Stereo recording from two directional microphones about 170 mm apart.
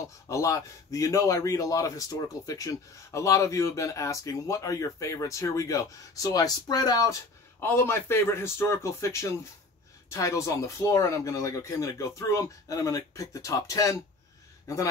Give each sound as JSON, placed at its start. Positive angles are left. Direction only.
{"t": 0.3, "sound": "a man's voice", "side_deg": 20}